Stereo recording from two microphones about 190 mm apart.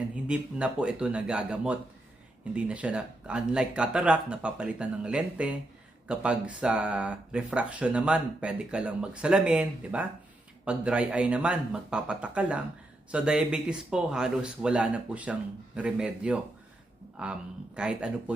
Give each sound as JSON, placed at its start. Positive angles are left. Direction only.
{"t": 0.3, "sound": "speech", "side_deg": -5}